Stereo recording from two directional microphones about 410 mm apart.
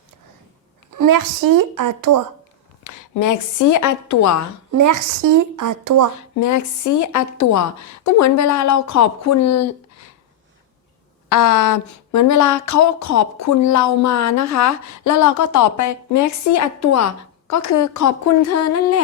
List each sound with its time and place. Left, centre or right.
0.9 s a woman's voice: right
2.8 s speech: left
4.7 s a woman's voice: right
6.1 s a woman's voice: left
11.3 s speech: left